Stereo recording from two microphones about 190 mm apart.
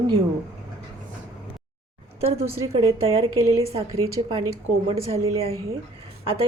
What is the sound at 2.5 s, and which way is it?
A woman's voice, 30° right (ahead or behind).